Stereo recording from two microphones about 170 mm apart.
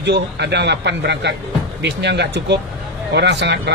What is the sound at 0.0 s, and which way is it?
Speech, 85° right.